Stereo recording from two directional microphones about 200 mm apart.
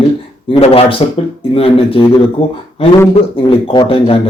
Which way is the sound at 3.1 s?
25° left (ahead or behind).